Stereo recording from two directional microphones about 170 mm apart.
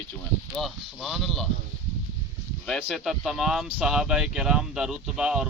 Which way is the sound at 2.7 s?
Centre (ahead or behind).